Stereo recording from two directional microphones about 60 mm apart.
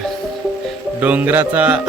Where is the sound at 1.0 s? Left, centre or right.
Right.